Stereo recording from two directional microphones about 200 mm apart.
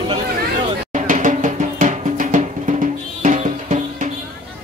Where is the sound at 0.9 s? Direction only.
40° right (ahead or behind).